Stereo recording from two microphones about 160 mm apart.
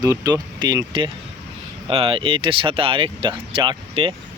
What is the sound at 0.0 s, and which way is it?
Speech, 25° right (ahead or behind).